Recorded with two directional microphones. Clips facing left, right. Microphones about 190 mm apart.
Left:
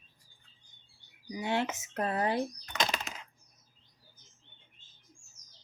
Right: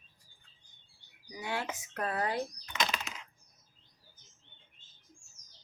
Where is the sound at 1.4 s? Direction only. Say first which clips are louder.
Left 5 dB; 25° left (ahead or behind).